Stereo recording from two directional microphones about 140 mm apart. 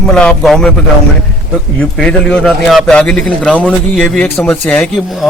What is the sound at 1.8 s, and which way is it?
A man's voice, 5° left (ahead or behind).